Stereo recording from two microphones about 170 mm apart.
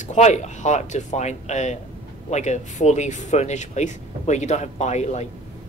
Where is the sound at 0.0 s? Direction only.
45° left (ahead or behind).